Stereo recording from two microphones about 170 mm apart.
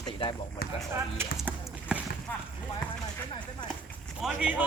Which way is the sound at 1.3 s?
5° right (ahead or behind).